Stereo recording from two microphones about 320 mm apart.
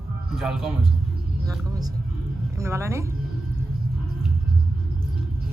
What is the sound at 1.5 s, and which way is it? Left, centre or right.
A woman's voice, centre.